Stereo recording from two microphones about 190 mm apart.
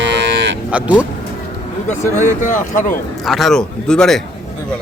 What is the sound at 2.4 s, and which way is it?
Speech, 40° left (ahead or behind).